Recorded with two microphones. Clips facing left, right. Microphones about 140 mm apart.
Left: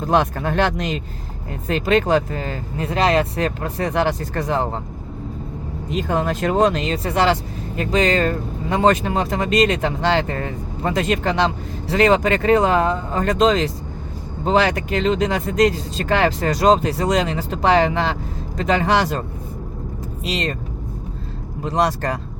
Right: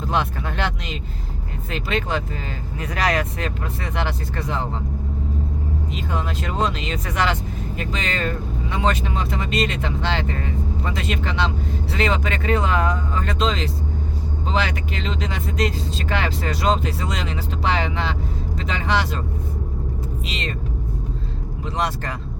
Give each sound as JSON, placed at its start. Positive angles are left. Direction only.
{"t": 0.0, "sound": "speech", "side_deg": 45}
{"t": 2.8, "sound": "speech", "side_deg": 25}
{"t": 3.3, "sound": "speech", "side_deg": 40}
{"t": 5.9, "sound": "speech", "side_deg": 50}
{"t": 6.9, "sound": "speech", "side_deg": 30}
{"t": 13.2, "sound": "speech", "side_deg": 45}
{"t": 20.2, "sound": "speech", "side_deg": 40}
{"t": 21.6, "sound": "speech", "side_deg": 40}